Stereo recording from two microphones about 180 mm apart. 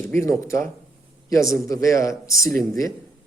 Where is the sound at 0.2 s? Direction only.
15° left (ahead or behind).